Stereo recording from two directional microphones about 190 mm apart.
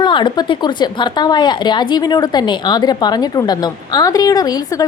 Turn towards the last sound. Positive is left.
turn(degrees=20)  # may be behind; listen again after turning